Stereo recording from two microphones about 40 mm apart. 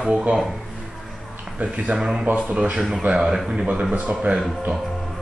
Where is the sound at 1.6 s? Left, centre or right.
Right.